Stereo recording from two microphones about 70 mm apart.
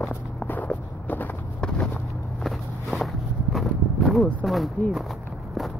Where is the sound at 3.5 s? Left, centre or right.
Centre.